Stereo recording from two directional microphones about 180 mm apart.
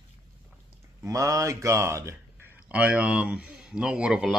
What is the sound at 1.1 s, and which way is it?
Speech, 15° right (ahead or behind).